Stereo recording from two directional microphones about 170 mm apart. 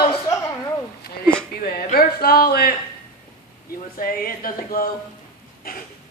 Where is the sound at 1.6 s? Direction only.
60° left (ahead or behind).